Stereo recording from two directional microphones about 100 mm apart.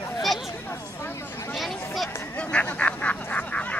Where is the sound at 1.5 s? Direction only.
Centre (ahead or behind).